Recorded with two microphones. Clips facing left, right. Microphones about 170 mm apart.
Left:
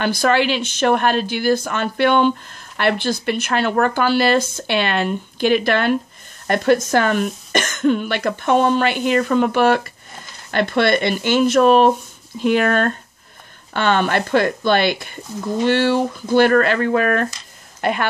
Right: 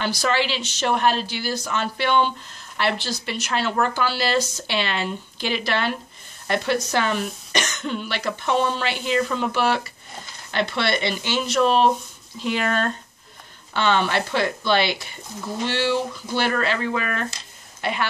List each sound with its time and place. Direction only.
0.0 s speech: 55° left (ahead or behind)